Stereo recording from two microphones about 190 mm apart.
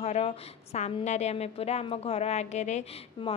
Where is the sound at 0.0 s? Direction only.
35° left (ahead or behind).